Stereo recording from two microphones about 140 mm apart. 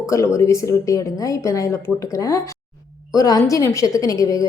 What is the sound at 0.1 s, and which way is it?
A woman's voice, 20° left (ahead or behind).